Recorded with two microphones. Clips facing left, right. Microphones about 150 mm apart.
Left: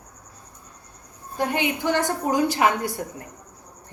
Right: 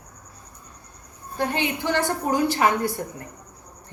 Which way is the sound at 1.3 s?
15° left (ahead or behind).